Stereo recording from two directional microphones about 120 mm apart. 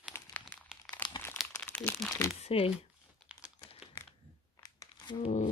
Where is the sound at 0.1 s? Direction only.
15° left (ahead or behind).